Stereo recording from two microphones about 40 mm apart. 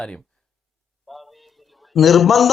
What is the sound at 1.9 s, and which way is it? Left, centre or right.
Speech, centre.